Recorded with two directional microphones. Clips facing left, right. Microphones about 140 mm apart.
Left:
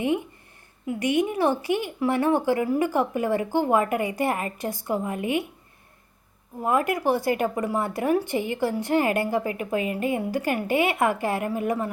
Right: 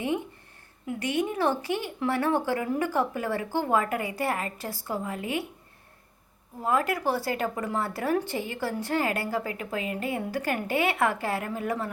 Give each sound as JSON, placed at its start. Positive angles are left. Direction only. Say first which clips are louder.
{"t": 0.9, "sound": "speech", "louder": "left 5 dB", "side_deg": 15}
{"t": 6.6, "sound": "speech", "louder": "left 3 dB", "side_deg": 15}